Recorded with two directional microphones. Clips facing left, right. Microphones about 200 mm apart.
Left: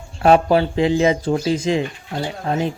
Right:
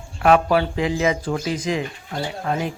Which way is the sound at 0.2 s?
30° left (ahead or behind).